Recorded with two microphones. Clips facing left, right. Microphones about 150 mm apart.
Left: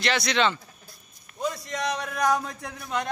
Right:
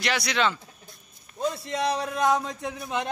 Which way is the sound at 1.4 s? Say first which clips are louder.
Right 2 dB; 30° right (ahead or behind).